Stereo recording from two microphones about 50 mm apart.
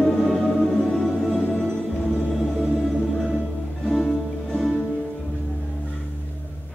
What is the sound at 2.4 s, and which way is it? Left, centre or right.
Music, centre.